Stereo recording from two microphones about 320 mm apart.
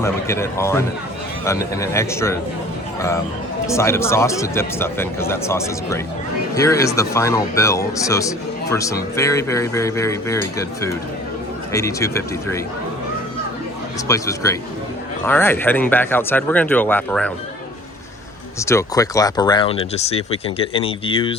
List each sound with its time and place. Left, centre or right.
0.0 s speech: centre
3.7 s speech: centre
14.1 s speech: centre
18.6 s speech: centre